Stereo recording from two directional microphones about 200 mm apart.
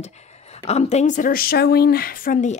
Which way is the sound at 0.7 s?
30° left (ahead or behind).